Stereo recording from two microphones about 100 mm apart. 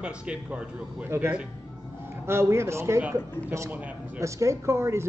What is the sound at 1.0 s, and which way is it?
A man's voice, 25° right (ahead or behind).